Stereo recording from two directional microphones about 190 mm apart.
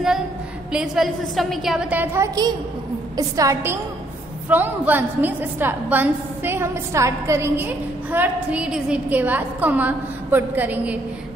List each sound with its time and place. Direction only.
0.7 s a woman's voice: 5° right (ahead or behind)